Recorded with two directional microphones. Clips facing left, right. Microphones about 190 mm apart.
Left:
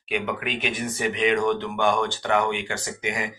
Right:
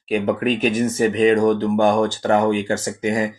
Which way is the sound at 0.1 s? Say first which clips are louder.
Right 9 dB; 40° right (ahead or behind).